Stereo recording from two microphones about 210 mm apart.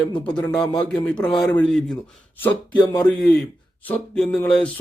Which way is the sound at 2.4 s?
15° left (ahead or behind).